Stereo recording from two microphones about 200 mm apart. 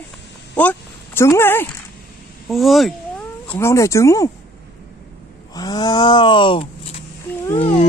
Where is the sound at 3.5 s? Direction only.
10° left (ahead or behind).